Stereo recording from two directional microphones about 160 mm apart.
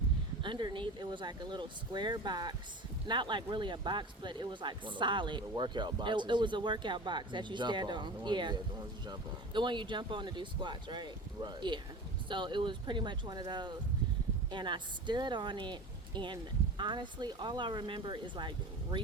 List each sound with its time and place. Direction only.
0.4 s speech: 30° right (ahead or behind)